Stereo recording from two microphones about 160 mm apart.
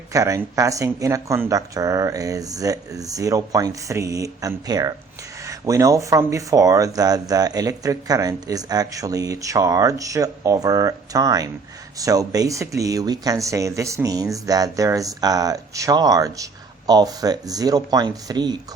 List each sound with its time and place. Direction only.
0.1 s speech: 20° right (ahead or behind)